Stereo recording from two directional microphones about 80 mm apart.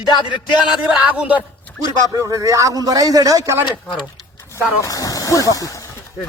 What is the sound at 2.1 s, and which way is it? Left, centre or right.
A man's voice, right.